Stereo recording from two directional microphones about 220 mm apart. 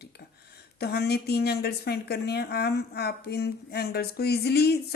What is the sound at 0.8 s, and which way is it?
A woman's voice, 45° left (ahead or behind).